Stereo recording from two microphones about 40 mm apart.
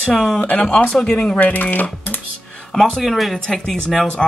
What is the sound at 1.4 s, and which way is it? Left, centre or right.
Speech, left.